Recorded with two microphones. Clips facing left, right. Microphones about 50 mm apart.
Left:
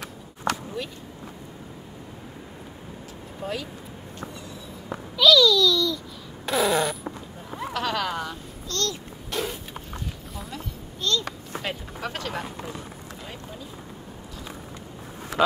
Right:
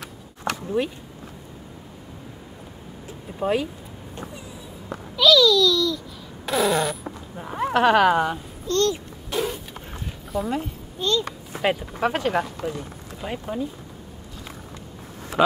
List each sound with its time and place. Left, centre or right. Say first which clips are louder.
0.8 s speech: right 9 dB; right
3.1 s a sound: right 9 dB; right
5.1 s fart: right 1 dB; centre
7.3 s a child's voice: right 10 dB; right
9.3 s a sound: right 4 dB; centre
10.3 s speech: right 16 dB; centre
11.0 s a child's voice: right 3 dB; centre
11.6 s speech: right 11 dB; right